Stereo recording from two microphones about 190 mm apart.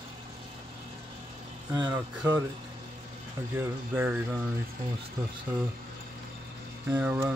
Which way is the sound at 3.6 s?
10° right (ahead or behind).